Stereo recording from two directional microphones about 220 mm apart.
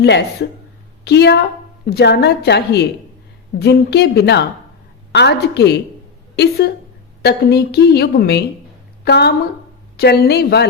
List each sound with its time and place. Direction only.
0.0 s a woman's voice: 50° left (ahead or behind)